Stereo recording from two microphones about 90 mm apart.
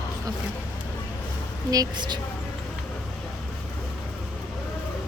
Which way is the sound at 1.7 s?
50° right (ahead or behind).